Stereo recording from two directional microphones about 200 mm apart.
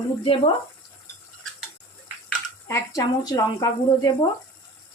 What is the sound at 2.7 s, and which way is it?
Speech, 15° left (ahead or behind).